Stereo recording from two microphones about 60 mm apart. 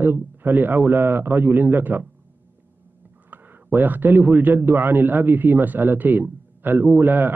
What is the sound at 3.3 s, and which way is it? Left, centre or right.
A man's voice, right.